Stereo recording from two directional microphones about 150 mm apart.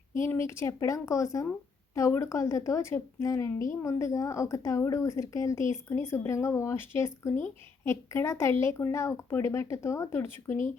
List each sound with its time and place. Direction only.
0.2 s speech: 20° left (ahead or behind)